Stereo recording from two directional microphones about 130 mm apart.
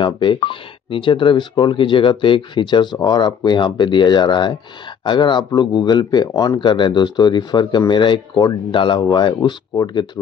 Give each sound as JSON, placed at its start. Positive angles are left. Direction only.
{"t": 0.0, "sound": "speech", "side_deg": 40}